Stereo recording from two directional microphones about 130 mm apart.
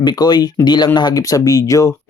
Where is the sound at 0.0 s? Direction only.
35° left (ahead or behind).